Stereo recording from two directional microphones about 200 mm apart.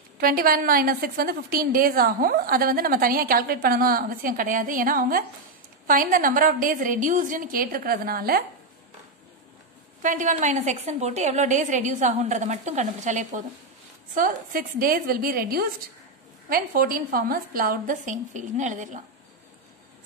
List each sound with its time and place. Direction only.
0.2 s a woman's voice: 45° right (ahead or behind)
10.0 s a woman's voice: 40° right (ahead or behind)